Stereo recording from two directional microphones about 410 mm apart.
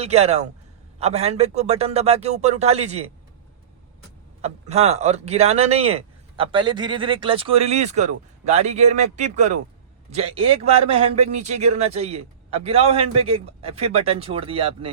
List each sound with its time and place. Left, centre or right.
0.0 s speech: centre
4.4 s speech: centre